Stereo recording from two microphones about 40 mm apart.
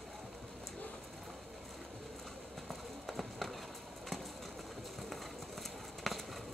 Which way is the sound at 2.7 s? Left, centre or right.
Centre.